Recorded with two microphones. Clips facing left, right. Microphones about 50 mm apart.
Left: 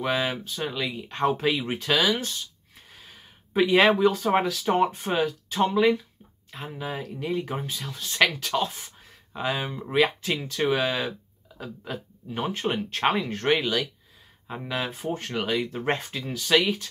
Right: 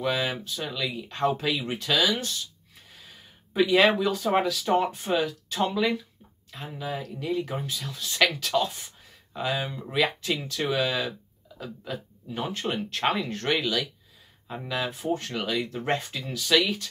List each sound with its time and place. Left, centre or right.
0.0 s speech: centre
0.8 s speech: centre
2.9 s a sound: centre
4.0 s speech: centre
5.1 s speech: left
6.6 s speech: centre